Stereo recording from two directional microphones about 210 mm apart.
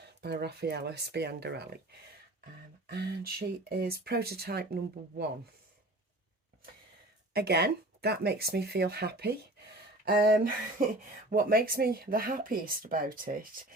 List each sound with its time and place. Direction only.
0.0 s speech: 50° right (ahead or behind)
2.9 s speech: 50° right (ahead or behind)
7.3 s speech: 50° right (ahead or behind)